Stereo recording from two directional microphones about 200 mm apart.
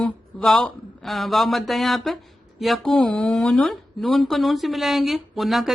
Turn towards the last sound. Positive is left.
turn(degrees=0)  # may be behind; listen again after turning